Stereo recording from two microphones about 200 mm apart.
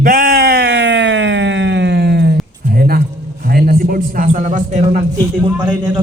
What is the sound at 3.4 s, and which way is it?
A man's voice, 50° right (ahead or behind).